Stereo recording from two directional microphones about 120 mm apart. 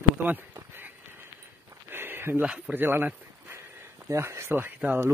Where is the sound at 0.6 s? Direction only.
15° right (ahead or behind).